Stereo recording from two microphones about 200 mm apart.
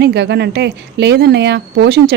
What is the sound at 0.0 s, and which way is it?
Speech, 55° right (ahead or behind).